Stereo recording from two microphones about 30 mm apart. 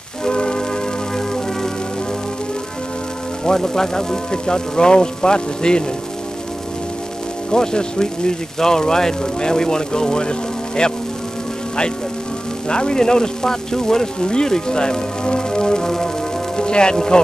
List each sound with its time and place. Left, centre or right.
0.2 s music: left
1.1 s music: centre
3.4 s speech: centre
7.5 s speech: left
12.6 s speech: left